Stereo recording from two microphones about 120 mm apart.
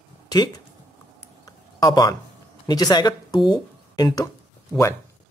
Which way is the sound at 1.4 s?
30° left (ahead or behind).